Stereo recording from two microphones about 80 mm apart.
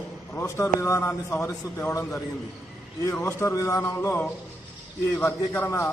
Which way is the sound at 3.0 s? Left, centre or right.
Left.